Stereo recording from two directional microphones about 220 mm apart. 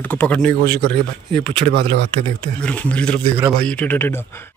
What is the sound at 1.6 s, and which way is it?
Speech, 35° right (ahead or behind).